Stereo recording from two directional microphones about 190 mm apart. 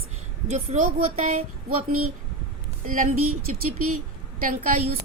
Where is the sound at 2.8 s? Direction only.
45° right (ahead or behind).